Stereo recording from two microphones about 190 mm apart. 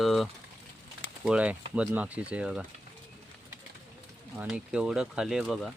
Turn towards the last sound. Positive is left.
turn(degrees=0)  # may be behind; listen again after turning